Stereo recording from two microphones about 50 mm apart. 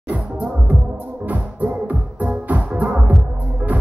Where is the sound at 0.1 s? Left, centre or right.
Right.